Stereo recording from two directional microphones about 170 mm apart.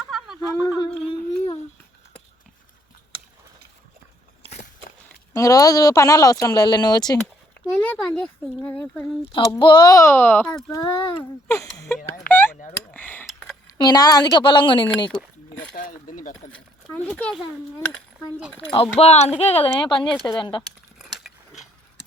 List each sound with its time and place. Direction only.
0.0 s a sound: centre (ahead or behind)
0.3 s a sound: 15° left (ahead or behind)
5.3 s speech: 20° left (ahead or behind)
7.8 s speech: 5° left (ahead or behind)
9.3 s speech: 25° left (ahead or behind); by 10.7 s 10° left (ahead or behind)
10.7 s speech: 20° left (ahead or behind)
12.3 s a sound: 10° left (ahead or behind)
13.7 s speech: 25° left (ahead or behind)
15.7 s speech: 50° left (ahead or behind)
16.9 s speech: 10° left (ahead or behind)
18.7 s speech: 35° left (ahead or behind)